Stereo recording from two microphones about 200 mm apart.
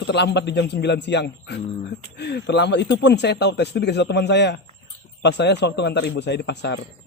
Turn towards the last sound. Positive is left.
turn(degrees=60)  # may be behind; listen again after turning